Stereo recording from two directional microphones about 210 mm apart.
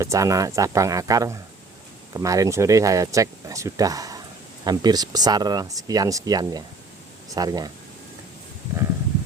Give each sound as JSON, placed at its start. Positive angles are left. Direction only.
{"t": 0.0, "sound": "speech", "side_deg": -15}